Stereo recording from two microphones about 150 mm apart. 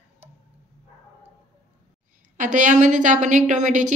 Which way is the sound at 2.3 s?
60° right (ahead or behind).